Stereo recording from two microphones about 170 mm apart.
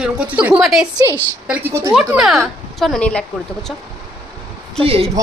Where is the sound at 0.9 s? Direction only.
25° right (ahead or behind).